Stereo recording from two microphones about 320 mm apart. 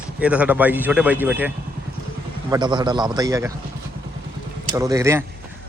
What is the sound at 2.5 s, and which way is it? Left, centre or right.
A man's voice, centre.